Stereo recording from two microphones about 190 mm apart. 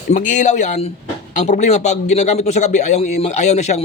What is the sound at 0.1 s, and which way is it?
A man's voice, 40° left (ahead or behind).